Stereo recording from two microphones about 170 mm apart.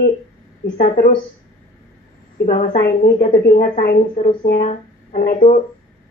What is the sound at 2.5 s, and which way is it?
Speech, 50° left (ahead or behind).